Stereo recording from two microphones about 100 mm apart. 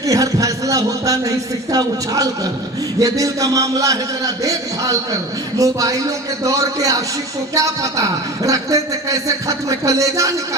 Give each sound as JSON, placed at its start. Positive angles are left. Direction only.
{"t": 0.1, "sound": "a man's voice", "side_deg": -35}
{"t": 5.5, "sound": "a man's voice", "side_deg": -35}